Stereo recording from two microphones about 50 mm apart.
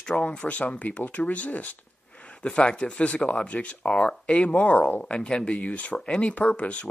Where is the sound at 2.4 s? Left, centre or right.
Left.